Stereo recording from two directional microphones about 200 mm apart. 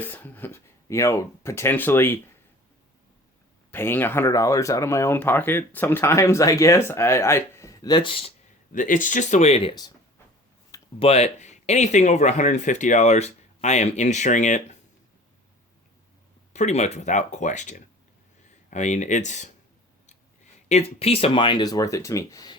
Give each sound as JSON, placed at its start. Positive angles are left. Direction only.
{"t": 0.0, "sound": "speech", "side_deg": 10}
{"t": 3.7, "sound": "speech", "side_deg": 10}
{"t": 8.7, "sound": "speech", "side_deg": 40}
{"t": 11.0, "sound": "speech", "side_deg": 30}
{"t": 16.5, "sound": "speech", "side_deg": 35}
{"t": 20.7, "sound": "speech", "side_deg": 30}